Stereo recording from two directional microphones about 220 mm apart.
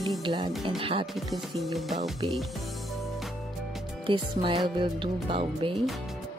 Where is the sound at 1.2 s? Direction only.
Centre (ahead or behind).